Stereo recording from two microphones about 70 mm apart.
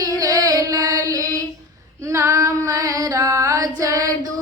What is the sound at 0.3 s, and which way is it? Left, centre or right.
Female singing, right.